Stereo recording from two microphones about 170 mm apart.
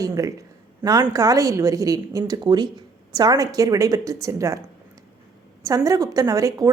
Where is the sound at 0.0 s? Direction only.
20° right (ahead or behind).